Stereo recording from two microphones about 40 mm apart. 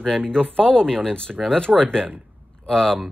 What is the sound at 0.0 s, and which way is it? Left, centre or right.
Speech, centre.